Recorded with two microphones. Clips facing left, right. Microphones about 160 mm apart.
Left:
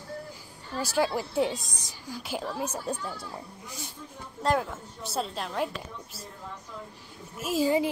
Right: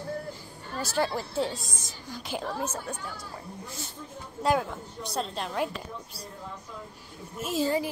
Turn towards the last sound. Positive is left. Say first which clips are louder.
# left 2 dB
turn(degrees=5)  # may be behind; listen again after turning